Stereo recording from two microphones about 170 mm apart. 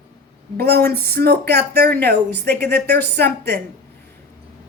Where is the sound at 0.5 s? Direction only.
70° right (ahead or behind).